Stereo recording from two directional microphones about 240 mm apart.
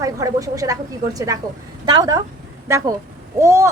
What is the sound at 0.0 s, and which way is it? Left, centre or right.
Speech, centre.